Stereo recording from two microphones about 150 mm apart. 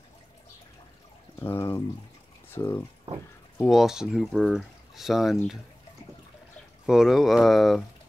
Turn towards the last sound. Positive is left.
turn(degrees=0)  # may be behind; listen again after turning